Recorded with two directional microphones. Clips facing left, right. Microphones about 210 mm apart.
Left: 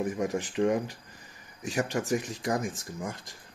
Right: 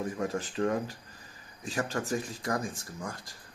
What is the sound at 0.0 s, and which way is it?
Speech, 15° left (ahead or behind).